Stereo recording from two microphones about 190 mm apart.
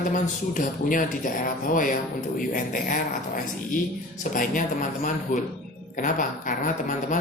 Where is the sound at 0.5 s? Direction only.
45° left (ahead or behind).